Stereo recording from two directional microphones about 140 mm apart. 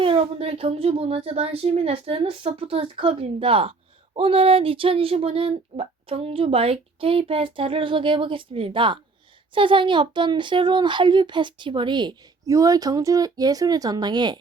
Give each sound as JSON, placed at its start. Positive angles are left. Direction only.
{"t": 0.3, "sound": "speech", "side_deg": -45}